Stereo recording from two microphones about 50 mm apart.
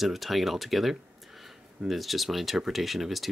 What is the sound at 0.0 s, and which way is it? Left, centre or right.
Speech, centre.